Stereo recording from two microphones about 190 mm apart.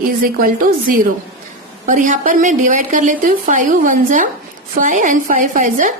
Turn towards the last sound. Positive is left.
turn(degrees=-45)  # may be behind; listen again after turning